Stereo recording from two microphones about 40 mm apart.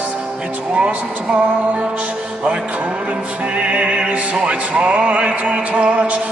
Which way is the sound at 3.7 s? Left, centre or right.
Right.